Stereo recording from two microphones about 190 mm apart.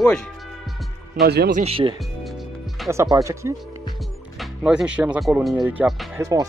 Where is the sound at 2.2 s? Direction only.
Centre (ahead or behind).